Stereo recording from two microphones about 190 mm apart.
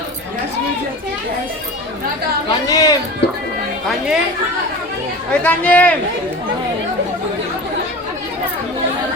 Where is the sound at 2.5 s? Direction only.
20° left (ahead or behind).